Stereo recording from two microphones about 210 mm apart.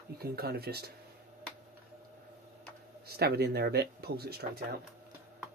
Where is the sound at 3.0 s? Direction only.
50° right (ahead or behind).